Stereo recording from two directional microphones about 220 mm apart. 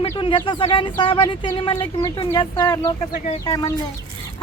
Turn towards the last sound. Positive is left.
turn(degrees=20)  # may be behind; listen again after turning